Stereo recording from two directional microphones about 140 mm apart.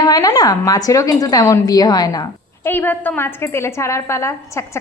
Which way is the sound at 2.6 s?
15° left (ahead or behind).